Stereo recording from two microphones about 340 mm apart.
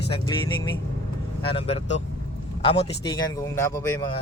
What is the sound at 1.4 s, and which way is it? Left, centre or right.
A man's voice, centre.